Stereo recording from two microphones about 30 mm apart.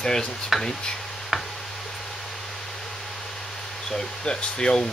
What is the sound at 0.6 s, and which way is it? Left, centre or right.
Speech, centre.